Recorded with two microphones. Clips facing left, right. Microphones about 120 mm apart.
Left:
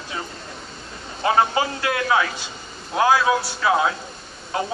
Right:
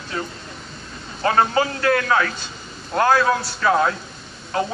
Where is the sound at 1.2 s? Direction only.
15° left (ahead or behind).